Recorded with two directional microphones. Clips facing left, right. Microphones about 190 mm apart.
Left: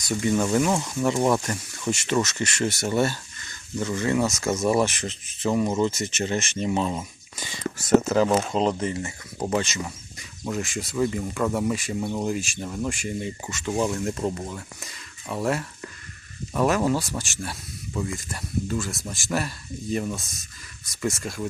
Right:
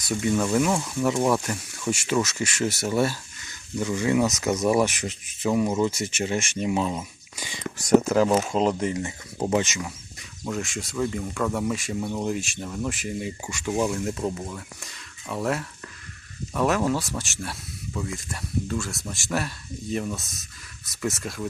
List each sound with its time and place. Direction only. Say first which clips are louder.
0.1 s speech: left 1 dB; centre (ahead or behind)
8.0 s speech: even; centre (ahead or behind)
9.0 s speech: right 2 dB; 20° right (ahead or behind)
10.5 s speech: left 1 dB; centre (ahead or behind)